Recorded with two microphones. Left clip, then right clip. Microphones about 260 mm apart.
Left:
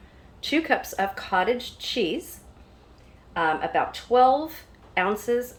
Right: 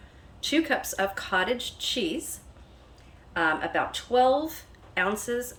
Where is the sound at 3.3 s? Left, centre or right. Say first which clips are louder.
Left 2 dB; centre.